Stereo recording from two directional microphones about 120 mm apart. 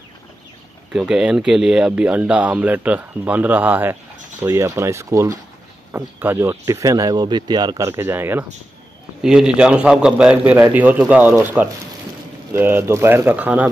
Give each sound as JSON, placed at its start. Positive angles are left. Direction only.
{"t": 0.9, "sound": "speech", "side_deg": -5}
{"t": 9.2, "sound": "speech", "side_deg": -5}